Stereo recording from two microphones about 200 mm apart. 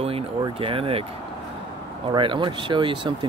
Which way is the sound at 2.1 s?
25° right (ahead or behind).